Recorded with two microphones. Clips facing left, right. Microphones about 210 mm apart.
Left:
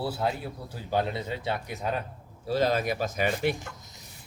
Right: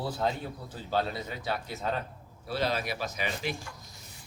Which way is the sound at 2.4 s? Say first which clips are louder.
Left 5 dB; 40° left (ahead or behind).